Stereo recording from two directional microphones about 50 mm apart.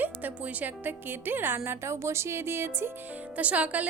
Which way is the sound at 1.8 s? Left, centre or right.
Right.